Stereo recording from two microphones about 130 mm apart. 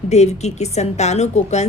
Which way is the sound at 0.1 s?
60° left (ahead or behind).